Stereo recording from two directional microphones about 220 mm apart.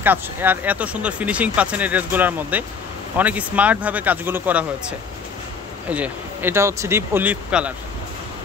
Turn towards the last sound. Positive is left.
turn(degrees=-5)  # may be behind; listen again after turning